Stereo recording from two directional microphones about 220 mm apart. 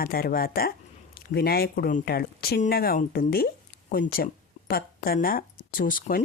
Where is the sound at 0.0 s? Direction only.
40° left (ahead or behind).